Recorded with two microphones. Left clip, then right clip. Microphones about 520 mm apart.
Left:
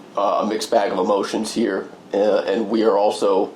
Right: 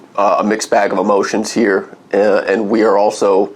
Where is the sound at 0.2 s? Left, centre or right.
Right.